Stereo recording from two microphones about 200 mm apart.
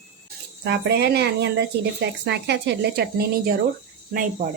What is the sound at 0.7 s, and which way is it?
Speech, 55° right (ahead or behind).